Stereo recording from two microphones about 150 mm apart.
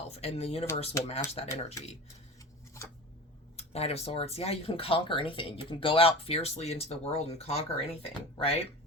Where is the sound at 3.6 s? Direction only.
45° left (ahead or behind).